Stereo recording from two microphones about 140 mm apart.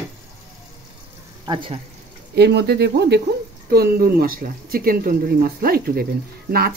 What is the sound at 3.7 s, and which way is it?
Speech, 90° right.